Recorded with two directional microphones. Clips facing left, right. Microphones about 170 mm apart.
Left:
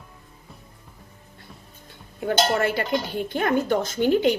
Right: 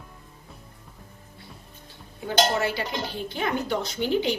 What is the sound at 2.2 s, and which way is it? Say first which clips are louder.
Speech: left 2 dB; 55° left (ahead or behind).